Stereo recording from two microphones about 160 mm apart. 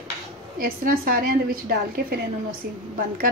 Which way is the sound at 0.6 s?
65° right (ahead or behind).